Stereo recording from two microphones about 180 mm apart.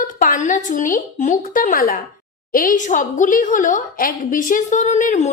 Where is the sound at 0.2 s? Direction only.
45° left (ahead or behind).